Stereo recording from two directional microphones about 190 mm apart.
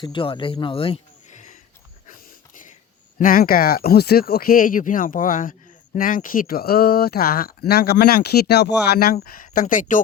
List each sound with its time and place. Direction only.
0.0 s speech: 25° left (ahead or behind)
3.2 s speech: 50° left (ahead or behind)